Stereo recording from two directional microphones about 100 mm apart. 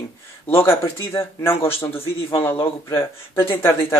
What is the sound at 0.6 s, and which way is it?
Speech, 25° left (ahead or behind).